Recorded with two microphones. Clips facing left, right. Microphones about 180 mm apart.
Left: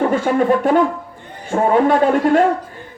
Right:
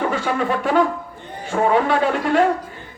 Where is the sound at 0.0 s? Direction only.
45° left (ahead or behind).